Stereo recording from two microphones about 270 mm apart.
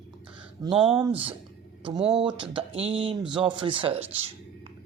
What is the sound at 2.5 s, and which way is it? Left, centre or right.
Speech, centre.